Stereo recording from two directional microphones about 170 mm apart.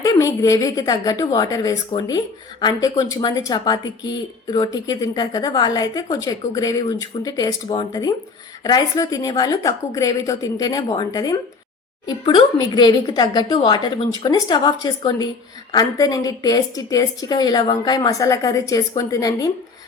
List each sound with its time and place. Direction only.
0.0 s speech: 20° left (ahead or behind)